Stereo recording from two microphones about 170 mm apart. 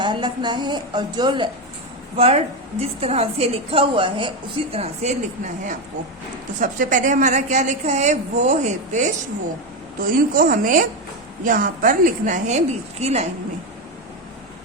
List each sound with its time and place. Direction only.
0.0 s a woman's voice: 25° right (ahead or behind)
6.6 s a woman's voice: 50° right (ahead or behind)